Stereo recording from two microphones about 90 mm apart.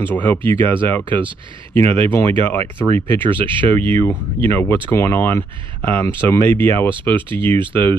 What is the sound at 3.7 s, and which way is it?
Speech, 20° left (ahead or behind).